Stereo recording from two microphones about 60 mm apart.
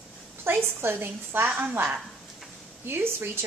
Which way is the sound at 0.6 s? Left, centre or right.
Right.